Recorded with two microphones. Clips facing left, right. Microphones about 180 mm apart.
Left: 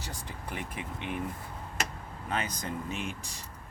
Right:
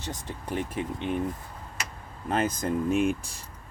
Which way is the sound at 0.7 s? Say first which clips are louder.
Right 7 dB; 35° right (ahead or behind).